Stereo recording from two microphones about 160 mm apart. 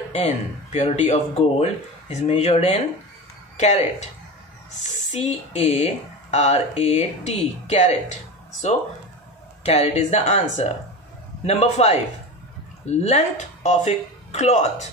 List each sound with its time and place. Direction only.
0.1 s speech: 40° left (ahead or behind)
5.1 s speech: 45° left (ahead or behind)
9.6 s speech: 40° left (ahead or behind)